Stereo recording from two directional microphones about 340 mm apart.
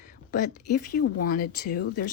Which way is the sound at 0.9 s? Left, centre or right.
Left.